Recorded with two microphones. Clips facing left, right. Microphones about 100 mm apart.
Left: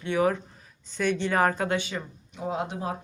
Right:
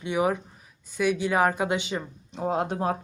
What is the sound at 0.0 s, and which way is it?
Speech, 15° right (ahead or behind).